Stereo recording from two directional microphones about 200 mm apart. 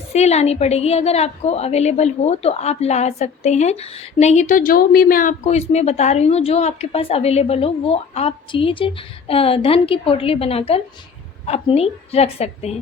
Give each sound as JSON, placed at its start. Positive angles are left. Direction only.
{"t": 0.1, "sound": "a woman's voice", "side_deg": 35}